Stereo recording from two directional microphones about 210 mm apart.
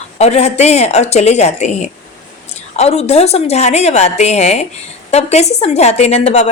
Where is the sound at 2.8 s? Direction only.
30° left (ahead or behind).